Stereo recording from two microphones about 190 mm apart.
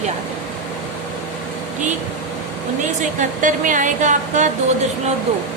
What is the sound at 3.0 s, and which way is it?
Speech, 40° right (ahead or behind).